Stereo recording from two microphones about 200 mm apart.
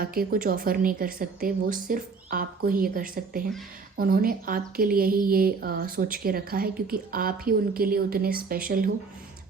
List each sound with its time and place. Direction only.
0.0 s speech: 45° right (ahead or behind)